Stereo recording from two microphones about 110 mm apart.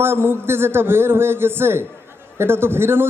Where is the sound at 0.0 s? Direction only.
20° right (ahead or behind).